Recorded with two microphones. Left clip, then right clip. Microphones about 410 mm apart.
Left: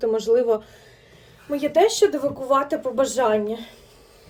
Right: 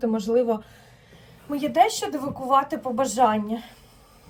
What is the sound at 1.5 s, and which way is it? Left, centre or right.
Speech, left.